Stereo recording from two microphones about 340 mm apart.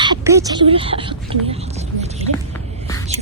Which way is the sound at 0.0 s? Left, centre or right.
Centre.